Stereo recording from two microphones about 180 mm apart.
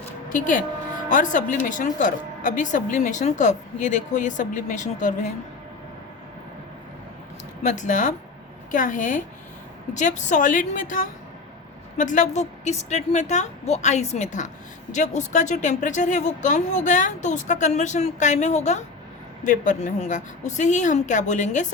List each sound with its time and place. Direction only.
0.3 s speech: 45° left (ahead or behind)
7.6 s a woman's voice: 40° left (ahead or behind)